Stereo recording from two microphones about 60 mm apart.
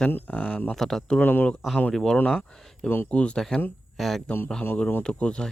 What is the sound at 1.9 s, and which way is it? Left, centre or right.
Speech, centre.